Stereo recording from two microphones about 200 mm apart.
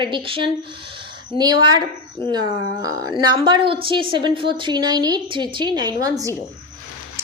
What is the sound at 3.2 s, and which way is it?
A woman's voice, 20° right (ahead or behind).